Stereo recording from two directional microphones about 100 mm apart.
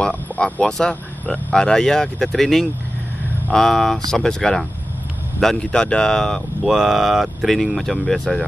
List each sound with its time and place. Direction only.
0.0 s speech: 10° left (ahead or behind)